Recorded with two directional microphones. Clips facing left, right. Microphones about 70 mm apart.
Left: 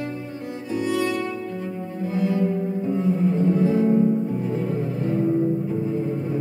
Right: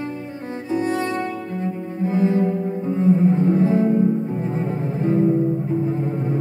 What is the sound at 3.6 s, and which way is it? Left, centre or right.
Music, right.